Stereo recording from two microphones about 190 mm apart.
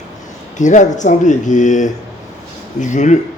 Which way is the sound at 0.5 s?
40° left (ahead or behind).